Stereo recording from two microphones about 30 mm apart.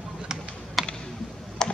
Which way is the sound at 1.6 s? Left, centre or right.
Left.